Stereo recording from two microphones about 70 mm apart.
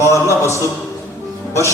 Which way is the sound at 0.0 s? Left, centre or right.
Left.